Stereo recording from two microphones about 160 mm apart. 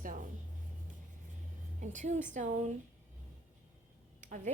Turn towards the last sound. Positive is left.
turn(degrees=-50)  # may be behind; listen again after turning